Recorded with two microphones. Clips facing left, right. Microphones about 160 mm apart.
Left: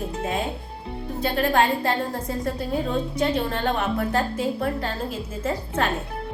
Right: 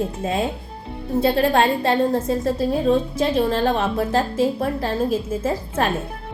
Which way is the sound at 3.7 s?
25° right (ahead or behind).